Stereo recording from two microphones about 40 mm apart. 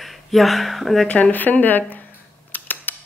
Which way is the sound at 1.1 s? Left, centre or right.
Left.